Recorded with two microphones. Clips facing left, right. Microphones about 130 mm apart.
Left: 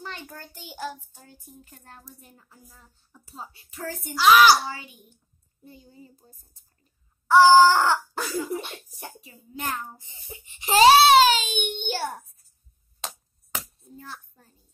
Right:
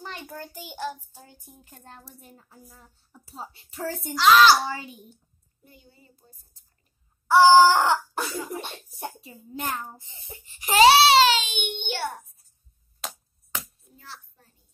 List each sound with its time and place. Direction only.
0.0 s child singing: 15° right (ahead or behind)
0.7 s child singing: centre (ahead or behind)
1.1 s speech: 15° right (ahead or behind); by 3.9 s 30° right (ahead or behind)
4.2 s a child's voice: 10° left (ahead or behind)
5.6 s a child's voice: 30° left (ahead or behind)
5.9 s child singing: 40° left (ahead or behind)
7.2 s speech: 15° right (ahead or behind)
10.3 s crying: 20° left (ahead or behind)
10.9 s child singing: 50° left (ahead or behind)
11.5 s a child's voice: 40° left (ahead or behind)
13.9 s a child's voice: 50° left (ahead or behind)